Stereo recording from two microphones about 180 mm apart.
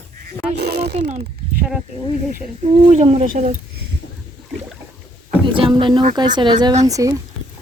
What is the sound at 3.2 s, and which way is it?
Speech, 45° right (ahead or behind).